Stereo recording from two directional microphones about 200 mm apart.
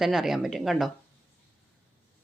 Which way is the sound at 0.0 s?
Centre (ahead or behind).